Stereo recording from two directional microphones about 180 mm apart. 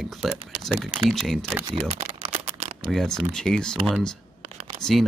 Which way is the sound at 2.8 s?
5° left (ahead or behind).